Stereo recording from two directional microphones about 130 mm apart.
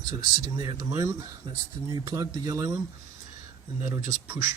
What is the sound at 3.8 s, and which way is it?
Speech, 20° right (ahead or behind).